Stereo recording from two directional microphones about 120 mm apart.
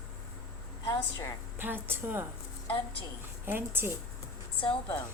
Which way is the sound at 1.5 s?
20° right (ahead or behind).